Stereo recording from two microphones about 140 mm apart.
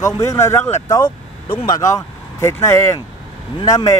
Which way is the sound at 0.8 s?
25° left (ahead or behind).